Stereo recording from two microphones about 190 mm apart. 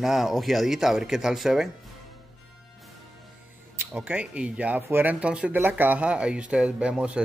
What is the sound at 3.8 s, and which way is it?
Speech, 5° right (ahead or behind).